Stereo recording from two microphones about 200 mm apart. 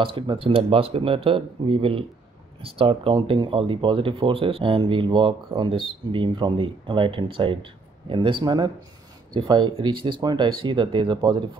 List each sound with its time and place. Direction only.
0.0 s speech: 25° right (ahead or behind)